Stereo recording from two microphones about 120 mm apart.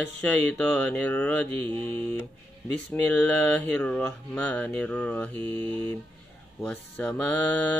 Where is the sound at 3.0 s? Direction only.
15° left (ahead or behind).